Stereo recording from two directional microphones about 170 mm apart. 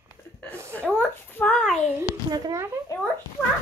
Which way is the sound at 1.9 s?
20° right (ahead or behind).